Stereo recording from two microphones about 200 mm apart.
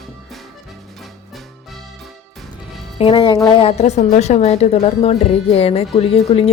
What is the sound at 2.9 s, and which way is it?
A woman's voice, 25° left (ahead or behind).